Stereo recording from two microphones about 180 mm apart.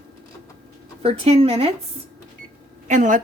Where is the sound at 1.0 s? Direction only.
35° right (ahead or behind).